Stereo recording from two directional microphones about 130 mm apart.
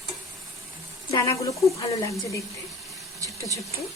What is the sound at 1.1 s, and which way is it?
Speech, 25° left (ahead or behind).